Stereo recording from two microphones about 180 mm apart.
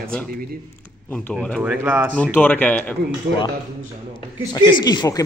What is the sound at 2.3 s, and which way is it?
Speech, 10° left (ahead or behind).